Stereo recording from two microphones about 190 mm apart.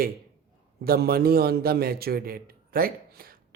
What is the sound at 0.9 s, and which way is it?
A man's voice, 55° right (ahead or behind).